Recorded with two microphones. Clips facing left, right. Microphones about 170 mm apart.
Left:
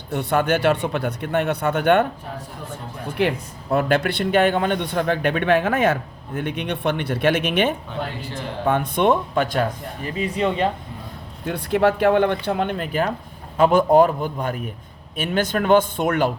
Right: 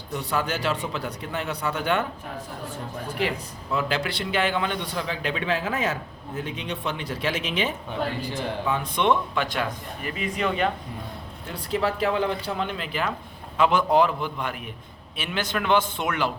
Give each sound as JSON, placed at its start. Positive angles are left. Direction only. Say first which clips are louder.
{"t": 0.1, "sound": "a man's voice", "louder": "left 7 dB", "side_deg": 60}
{"t": 3.2, "sound": "a man's voice", "louder": "left 7 dB", "side_deg": 60}
{"t": 8.6, "sound": "a man's voice", "louder": "left 6 dB", "side_deg": 50}
{"t": 10.0, "sound": "speech", "louder": "left 5 dB", "side_deg": 30}
{"t": 11.4, "sound": "a man's voice", "louder": "left 7 dB", "side_deg": 65}